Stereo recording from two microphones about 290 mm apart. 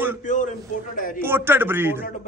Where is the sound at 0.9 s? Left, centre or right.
Left.